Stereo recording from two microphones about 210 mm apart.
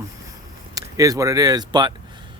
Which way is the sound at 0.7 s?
15° right (ahead or behind).